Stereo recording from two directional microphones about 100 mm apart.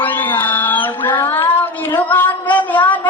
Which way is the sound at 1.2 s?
20° left (ahead or behind).